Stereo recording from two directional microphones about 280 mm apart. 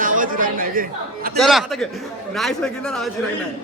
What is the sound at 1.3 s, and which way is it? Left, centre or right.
Speech, centre.